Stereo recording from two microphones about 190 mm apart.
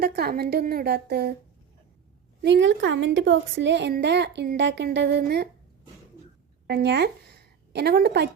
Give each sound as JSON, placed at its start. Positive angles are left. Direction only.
{"t": 0.0, "sound": "a woman's voice", "side_deg": -55}
{"t": 2.4, "sound": "a woman's voice", "side_deg": -70}
{"t": 6.7, "sound": "a woman's voice", "side_deg": -60}